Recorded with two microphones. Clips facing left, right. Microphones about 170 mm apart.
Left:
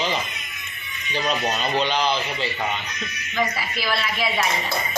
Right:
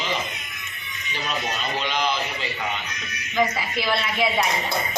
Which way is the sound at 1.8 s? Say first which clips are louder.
Left 1 dB; 30° left (ahead or behind).